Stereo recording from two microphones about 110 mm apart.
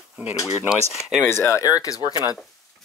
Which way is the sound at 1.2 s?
25° left (ahead or behind).